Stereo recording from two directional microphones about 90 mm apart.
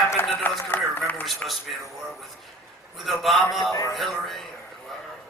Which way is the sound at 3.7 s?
40° left (ahead or behind).